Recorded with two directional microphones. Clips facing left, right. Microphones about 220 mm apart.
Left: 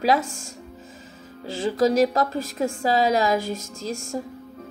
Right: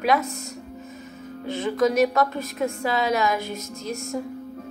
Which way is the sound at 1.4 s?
30° left (ahead or behind).